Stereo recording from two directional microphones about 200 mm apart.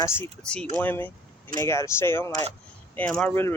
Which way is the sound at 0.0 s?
10° left (ahead or behind).